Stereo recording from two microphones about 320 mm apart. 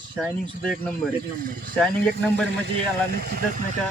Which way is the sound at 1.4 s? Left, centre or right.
Right.